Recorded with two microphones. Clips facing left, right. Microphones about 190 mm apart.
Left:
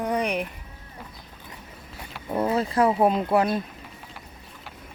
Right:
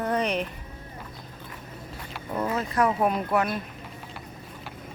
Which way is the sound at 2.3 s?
30° left (ahead or behind).